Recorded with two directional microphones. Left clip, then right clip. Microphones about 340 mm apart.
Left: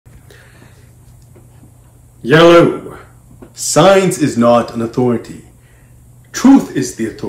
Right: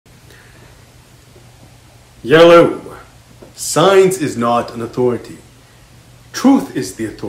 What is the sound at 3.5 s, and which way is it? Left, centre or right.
Speech, centre.